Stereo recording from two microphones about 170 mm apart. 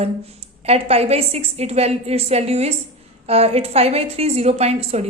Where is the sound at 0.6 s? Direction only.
35° right (ahead or behind).